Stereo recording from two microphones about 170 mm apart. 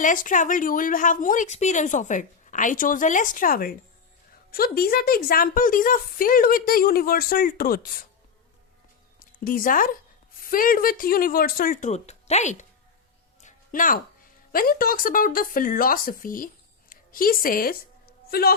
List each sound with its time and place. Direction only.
0.0 s speech: 50° left (ahead or behind)
9.1 s speech: 55° left (ahead or behind)
13.4 s music: 50° left (ahead or behind)
14.5 s a woman's voice: 60° left (ahead or behind)